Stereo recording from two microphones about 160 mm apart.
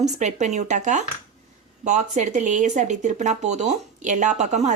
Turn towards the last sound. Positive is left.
turn(degrees=-45)  # may be behind; listen again after turning